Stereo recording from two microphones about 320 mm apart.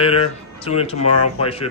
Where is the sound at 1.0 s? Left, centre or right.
Left.